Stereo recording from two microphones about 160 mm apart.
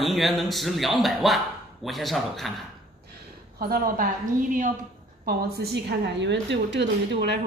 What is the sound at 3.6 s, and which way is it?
Speech, 70° right (ahead or behind).